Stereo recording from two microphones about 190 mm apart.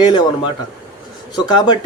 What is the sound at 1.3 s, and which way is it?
Speech, 20° left (ahead or behind).